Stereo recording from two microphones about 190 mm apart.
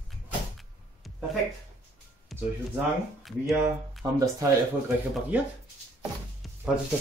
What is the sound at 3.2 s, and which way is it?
Speech, centre (ahead or behind).